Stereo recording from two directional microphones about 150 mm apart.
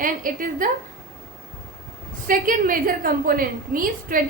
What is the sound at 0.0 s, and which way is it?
Speech, 65° right (ahead or behind).